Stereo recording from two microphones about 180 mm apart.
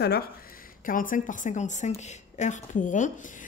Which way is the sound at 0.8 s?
50° left (ahead or behind).